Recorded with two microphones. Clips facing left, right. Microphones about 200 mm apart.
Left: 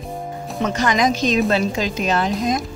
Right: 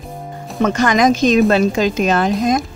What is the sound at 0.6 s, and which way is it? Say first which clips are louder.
A woman's voice: right 5 dB; 50° right (ahead or behind).